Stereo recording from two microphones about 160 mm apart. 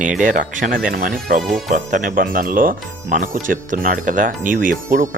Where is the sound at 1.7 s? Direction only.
55° right (ahead or behind).